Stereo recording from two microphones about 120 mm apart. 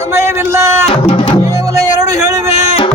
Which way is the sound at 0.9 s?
45° left (ahead or behind).